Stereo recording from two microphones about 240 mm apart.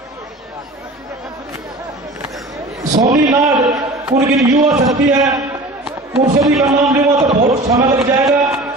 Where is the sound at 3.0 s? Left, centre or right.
Centre.